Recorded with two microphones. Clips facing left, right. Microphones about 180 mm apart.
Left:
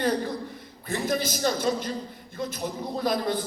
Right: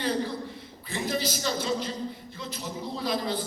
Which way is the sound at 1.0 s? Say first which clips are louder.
Left 3 dB; 50° left (ahead or behind).